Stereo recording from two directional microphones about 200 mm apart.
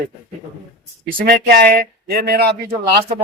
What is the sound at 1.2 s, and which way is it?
Speech, 50° right (ahead or behind).